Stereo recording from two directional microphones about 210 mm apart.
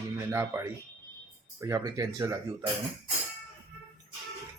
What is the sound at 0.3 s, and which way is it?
Speech, 10° right (ahead or behind).